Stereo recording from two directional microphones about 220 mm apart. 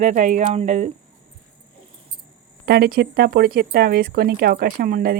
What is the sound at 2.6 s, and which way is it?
Speech, 45° right (ahead or behind).